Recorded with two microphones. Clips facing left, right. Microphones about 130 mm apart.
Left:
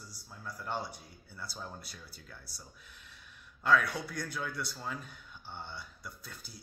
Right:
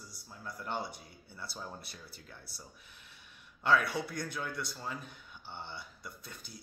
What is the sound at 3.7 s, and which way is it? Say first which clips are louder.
A man's voice: left 1 dB; centre (ahead or behind).